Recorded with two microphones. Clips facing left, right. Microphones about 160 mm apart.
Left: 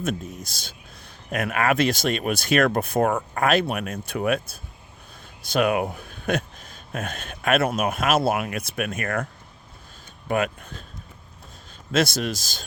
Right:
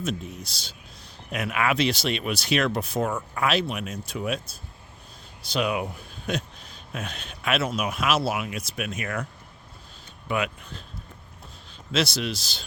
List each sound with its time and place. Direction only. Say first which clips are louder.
0.0 s speech: left 2 dB; 50° left (ahead or behind)
10.2 s speech: left 4 dB; 45° left (ahead or behind)
11.9 s speech: left 3 dB; 50° left (ahead or behind)